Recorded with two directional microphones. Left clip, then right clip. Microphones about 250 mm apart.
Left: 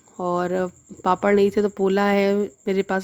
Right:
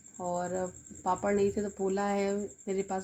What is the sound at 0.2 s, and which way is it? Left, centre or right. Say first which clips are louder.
Speech: left 10 dB; left.